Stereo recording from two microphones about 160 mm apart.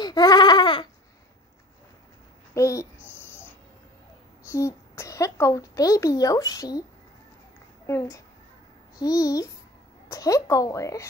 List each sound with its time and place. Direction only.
0.0 s sheep: 25° left (ahead or behind)
2.5 s a woman's voice: 20° left (ahead or behind)
3.0 s a sound: 10° right (ahead or behind)
4.5 s speech: 20° left (ahead or behind)
7.8 s a child's voice: 20° left (ahead or behind)